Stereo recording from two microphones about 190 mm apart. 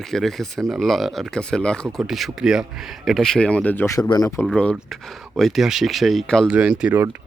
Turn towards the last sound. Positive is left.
turn(degrees=-10)  # may be behind; listen again after turning